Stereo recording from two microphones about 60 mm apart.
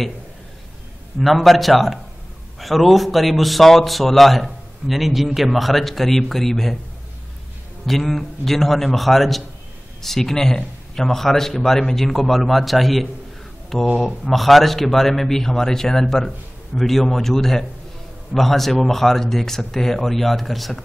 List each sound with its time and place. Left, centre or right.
1.2 s a man's voice: centre
7.8 s a man's voice: centre